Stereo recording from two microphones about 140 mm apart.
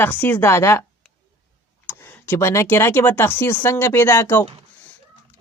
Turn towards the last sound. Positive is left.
turn(degrees=20)  # may be behind; listen again after turning